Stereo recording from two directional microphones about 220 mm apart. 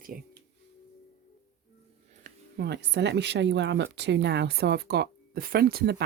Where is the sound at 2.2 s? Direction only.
50° right (ahead or behind).